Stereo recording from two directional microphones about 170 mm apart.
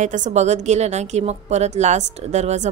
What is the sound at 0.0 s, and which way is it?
A woman's voice, 45° right (ahead or behind).